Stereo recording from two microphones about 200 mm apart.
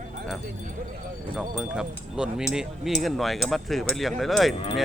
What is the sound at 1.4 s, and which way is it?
Speech, 5° right (ahead or behind).